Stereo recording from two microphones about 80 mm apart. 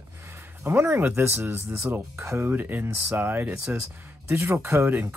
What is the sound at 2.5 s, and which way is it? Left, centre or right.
Speech, right.